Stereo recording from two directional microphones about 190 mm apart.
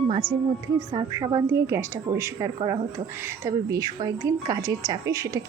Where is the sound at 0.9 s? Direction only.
20° right (ahead or behind).